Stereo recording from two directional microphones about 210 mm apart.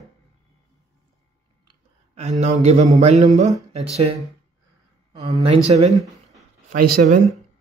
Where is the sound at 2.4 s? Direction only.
30° right (ahead or behind).